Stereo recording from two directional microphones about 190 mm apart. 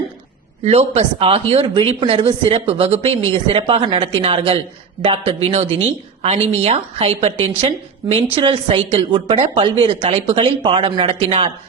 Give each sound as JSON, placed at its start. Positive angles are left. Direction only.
{"t": 0.6, "sound": "speech", "side_deg": -35}